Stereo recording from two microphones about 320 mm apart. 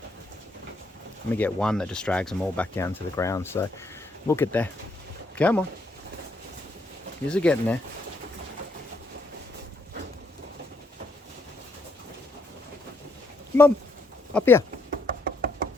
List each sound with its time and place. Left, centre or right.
1.3 s speech: centre
7.3 s speech: centre
14.3 s speech: centre
14.8 s knock: right